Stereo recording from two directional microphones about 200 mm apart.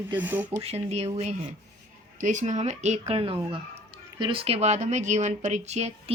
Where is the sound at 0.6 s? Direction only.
30° right (ahead or behind).